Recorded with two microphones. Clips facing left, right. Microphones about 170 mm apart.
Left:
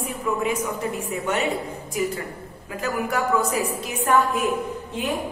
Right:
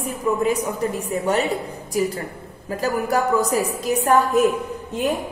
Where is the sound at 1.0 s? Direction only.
35° right (ahead or behind).